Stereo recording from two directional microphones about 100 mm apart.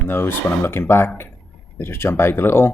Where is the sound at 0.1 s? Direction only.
20° left (ahead or behind).